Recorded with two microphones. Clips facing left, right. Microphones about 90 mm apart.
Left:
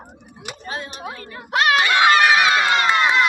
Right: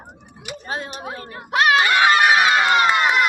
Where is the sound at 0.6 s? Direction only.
40° right (ahead or behind).